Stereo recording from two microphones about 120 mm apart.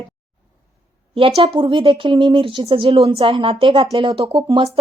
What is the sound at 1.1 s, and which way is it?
Speech, 50° right (ahead or behind).